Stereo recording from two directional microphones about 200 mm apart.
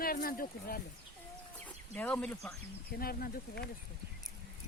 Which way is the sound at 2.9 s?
50° left (ahead or behind).